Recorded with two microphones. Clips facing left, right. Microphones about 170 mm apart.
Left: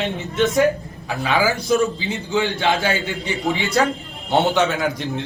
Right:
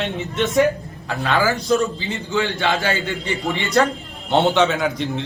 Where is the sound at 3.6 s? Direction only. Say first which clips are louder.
Right 1 dB; centre (ahead or behind).